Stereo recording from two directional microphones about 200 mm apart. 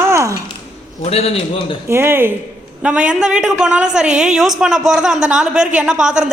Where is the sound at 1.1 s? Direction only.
30° left (ahead or behind).